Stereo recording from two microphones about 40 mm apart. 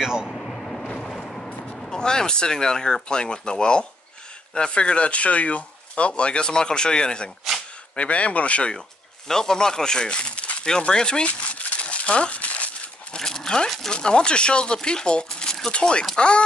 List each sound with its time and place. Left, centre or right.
0.0 s speech: centre
0.3 s vehicle: centre
1.8 s speech: centre
7.9 s speech: left
9.3 s speech: centre; by 10.6 s left
10.8 s speech: left
11.2 s a sound: left
13.1 s dog: centre
13.9 s speech: left